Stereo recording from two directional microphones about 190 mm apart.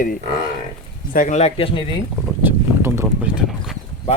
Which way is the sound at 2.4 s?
10° right (ahead or behind).